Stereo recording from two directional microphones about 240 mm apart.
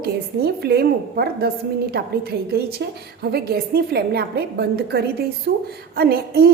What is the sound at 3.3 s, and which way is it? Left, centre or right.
A woman's voice, right.